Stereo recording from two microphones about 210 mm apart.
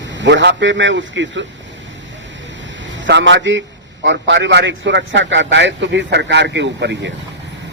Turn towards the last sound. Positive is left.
turn(degrees=-55)  # may be behind; listen again after turning